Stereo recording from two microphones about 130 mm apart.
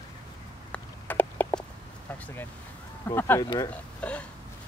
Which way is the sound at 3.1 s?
20° left (ahead or behind).